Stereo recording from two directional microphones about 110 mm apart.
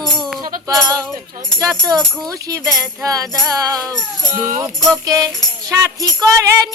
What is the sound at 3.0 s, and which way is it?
Music, 30° right (ahead or behind).